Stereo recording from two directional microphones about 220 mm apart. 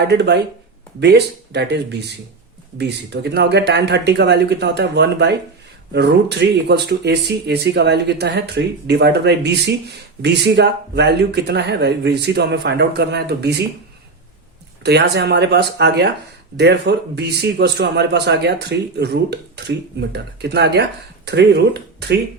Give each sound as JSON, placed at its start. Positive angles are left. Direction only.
{"t": 0.0, "sound": "speech", "side_deg": -50}
{"t": 14.8, "sound": "speech", "side_deg": -50}